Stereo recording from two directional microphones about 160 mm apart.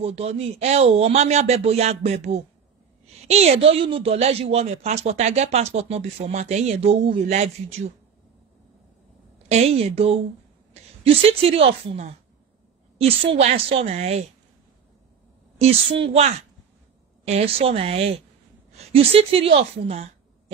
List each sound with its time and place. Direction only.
0.0 s speech: 40° right (ahead or behind)
9.5 s a woman's voice: 40° right (ahead or behind)
15.6 s a woman's voice: 35° right (ahead or behind)